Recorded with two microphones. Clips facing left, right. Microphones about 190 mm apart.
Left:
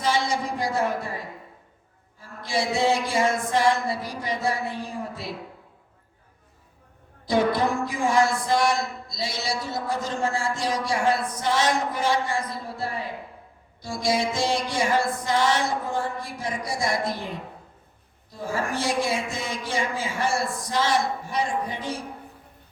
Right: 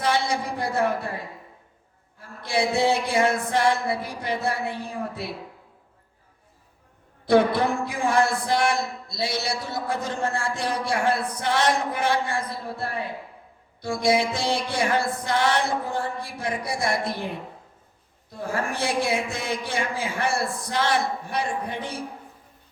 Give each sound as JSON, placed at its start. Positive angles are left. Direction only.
{"t": 0.0, "sound": "a sound", "side_deg": -60}
{"t": 2.4, "sound": "a man's voice", "side_deg": -60}
{"t": 7.3, "sound": "a man's voice", "side_deg": -60}
{"t": 18.3, "sound": "a man's voice", "side_deg": -60}